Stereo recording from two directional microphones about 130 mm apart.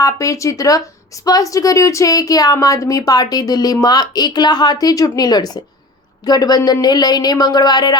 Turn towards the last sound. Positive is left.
turn(degrees=30)  # may be behind; listen again after turning